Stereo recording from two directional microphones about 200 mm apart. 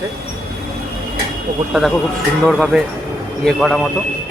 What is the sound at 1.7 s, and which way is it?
Speech, centre (ahead or behind).